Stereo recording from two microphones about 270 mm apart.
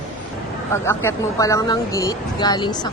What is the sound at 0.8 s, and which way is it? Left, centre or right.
Speech, centre.